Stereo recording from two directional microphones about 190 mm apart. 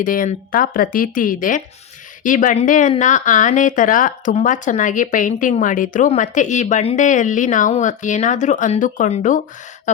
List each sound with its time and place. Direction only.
0.0 s a woman's voice: 45° left (ahead or behind)